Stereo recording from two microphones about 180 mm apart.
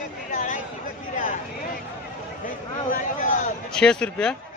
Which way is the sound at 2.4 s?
45° left (ahead or behind).